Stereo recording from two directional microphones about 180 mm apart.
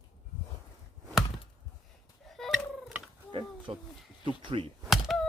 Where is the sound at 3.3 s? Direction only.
30° right (ahead or behind).